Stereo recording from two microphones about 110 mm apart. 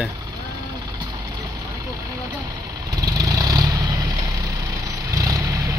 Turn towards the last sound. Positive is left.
turn(degrees=-30)  # may be behind; listen again after turning